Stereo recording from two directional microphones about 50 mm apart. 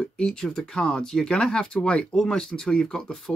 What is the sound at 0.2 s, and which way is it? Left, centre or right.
Speech, centre.